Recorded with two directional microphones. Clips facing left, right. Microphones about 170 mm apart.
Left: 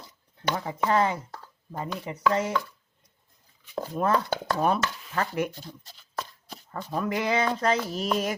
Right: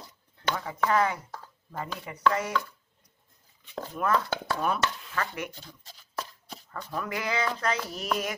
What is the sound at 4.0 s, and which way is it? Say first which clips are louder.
Speech: left 2 dB; 35° left (ahead or behind).